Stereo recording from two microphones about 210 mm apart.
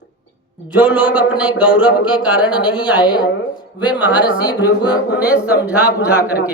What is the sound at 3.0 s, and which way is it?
Speech, 20° left (ahead or behind).